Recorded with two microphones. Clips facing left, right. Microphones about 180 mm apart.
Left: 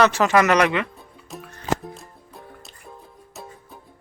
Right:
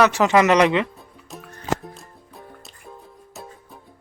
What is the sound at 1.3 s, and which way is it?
Music, centre (ahead or behind).